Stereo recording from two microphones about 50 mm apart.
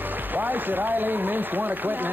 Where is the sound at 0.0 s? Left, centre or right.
Right.